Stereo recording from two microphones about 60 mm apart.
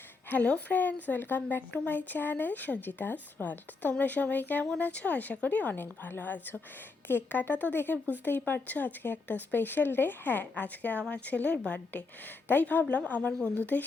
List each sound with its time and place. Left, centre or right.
0.3 s a woman's voice: left